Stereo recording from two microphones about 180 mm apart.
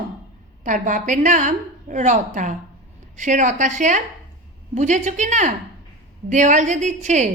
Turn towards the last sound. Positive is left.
turn(degrees=-40)  # may be behind; listen again after turning